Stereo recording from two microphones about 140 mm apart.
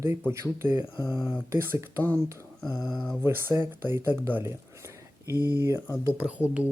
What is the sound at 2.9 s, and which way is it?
Speech, centre (ahead or behind).